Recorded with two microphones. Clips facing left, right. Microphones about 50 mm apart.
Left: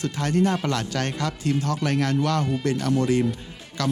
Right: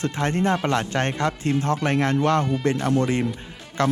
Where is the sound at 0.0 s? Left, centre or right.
Right.